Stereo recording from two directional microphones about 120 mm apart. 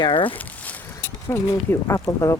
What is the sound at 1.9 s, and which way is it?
Speech, 25° left (ahead or behind).